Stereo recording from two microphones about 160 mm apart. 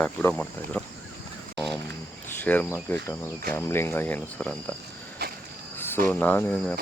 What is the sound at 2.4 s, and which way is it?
Speech, 10° left (ahead or behind).